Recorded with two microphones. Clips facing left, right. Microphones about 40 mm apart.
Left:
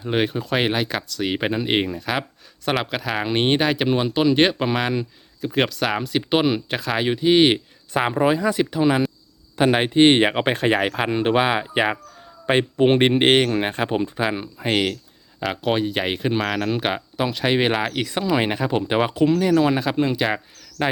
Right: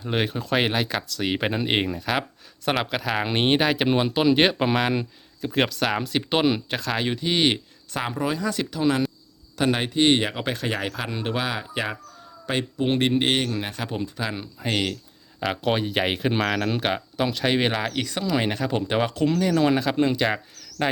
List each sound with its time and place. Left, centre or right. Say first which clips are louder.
0.0 s speech: left 4 dB; centre; by 12.6 s left
12.8 s speech: left 5 dB; left
15.4 s speech: left 2 dB; centre